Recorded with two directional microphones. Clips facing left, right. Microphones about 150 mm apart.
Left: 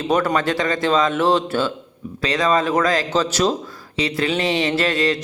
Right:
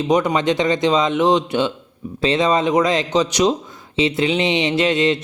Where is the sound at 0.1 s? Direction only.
15° right (ahead or behind).